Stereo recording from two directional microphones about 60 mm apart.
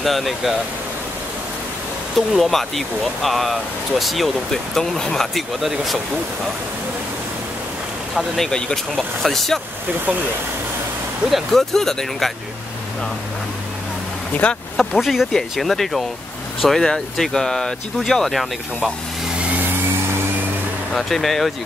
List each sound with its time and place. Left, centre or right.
0.0 s speech: centre
2.1 s speech: centre
8.4 s speech: centre
11.2 s speech: centre
14.3 s speech: left
14.8 s speech: centre
20.9 s speech: centre